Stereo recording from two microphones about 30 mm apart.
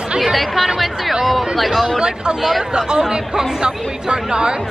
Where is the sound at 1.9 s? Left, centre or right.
Right.